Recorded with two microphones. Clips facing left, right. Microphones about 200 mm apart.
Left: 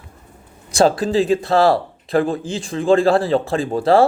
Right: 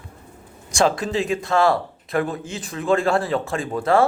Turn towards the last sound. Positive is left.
turn(degrees=30)  # may be behind; listen again after turning